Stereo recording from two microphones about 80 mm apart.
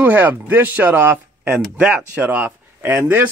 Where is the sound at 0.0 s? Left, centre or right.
Right.